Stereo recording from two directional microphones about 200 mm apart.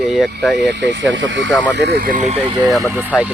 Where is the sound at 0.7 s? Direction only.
65° right (ahead or behind).